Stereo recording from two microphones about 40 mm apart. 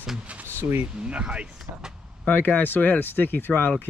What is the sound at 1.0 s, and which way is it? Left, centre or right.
Speech, right.